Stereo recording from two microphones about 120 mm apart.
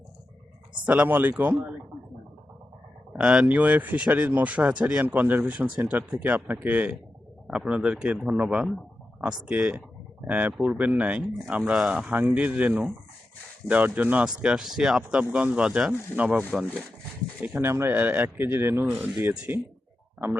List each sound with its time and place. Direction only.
0.9 s speech: 15° right (ahead or behind)
3.1 s speech: 10° right (ahead or behind)
17.4 s speech: 20° right (ahead or behind)